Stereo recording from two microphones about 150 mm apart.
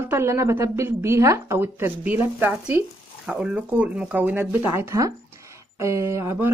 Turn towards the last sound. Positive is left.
turn(degrees=-20)  # may be behind; listen again after turning